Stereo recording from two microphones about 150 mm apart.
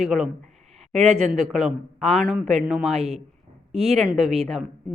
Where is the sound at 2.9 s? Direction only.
45° right (ahead or behind).